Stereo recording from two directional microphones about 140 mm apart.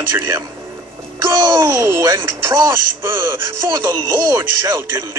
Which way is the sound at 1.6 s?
20° right (ahead or behind).